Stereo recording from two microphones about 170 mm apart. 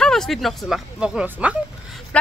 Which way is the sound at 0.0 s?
5° left (ahead or behind).